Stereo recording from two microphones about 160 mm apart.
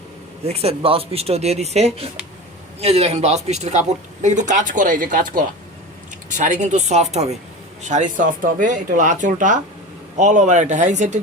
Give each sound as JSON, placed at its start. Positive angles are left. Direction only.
{"t": 0.4, "sound": "a man's voice", "side_deg": -40}